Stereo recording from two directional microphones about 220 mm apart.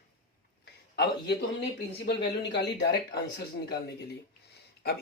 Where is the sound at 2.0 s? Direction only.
50° left (ahead or behind).